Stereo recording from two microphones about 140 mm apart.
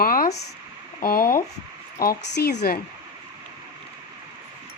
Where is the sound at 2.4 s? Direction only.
90° left.